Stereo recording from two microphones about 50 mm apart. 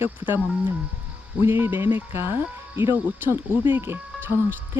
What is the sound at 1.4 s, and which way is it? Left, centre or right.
Speech, right.